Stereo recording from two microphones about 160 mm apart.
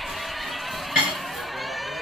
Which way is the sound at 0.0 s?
Centre (ahead or behind).